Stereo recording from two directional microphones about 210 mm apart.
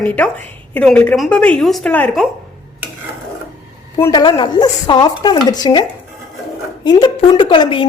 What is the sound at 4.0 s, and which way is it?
A woman's voice, 20° left (ahead or behind).